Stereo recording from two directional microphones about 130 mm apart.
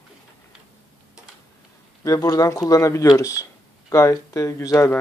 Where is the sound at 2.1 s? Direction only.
25° left (ahead or behind).